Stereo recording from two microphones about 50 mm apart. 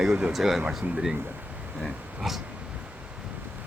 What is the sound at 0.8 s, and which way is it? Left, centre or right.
Speech, right.